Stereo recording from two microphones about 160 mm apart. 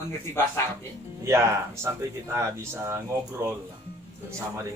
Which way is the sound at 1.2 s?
15° right (ahead or behind).